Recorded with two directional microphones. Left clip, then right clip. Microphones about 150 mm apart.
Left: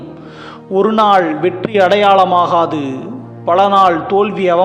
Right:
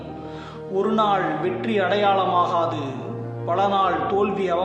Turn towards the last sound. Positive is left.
turn(degrees=55)  # may be behind; listen again after turning